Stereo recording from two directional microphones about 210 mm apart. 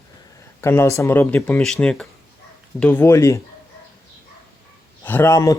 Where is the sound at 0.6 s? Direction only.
10° left (ahead or behind).